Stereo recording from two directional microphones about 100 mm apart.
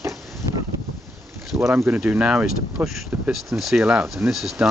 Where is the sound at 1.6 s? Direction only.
25° right (ahead or behind).